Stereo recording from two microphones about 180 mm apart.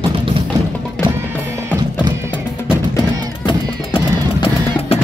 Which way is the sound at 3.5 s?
30° left (ahead or behind).